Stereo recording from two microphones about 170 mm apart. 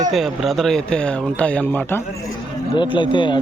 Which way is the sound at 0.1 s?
5° right (ahead or behind).